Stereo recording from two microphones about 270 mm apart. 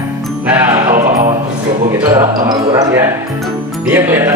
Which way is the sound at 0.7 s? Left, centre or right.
Right.